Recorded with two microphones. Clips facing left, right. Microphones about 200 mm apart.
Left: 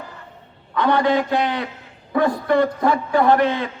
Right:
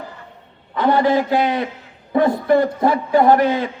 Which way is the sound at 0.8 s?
25° right (ahead or behind).